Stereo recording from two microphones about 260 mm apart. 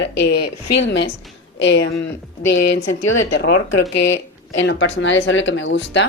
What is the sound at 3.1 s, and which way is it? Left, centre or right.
Speech, left.